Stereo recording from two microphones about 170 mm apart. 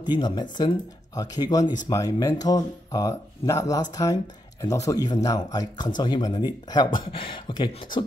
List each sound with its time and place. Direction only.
0.0 s speech: 25° left (ahead or behind)